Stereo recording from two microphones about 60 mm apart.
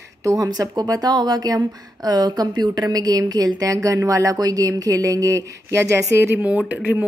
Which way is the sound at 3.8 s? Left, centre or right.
Right.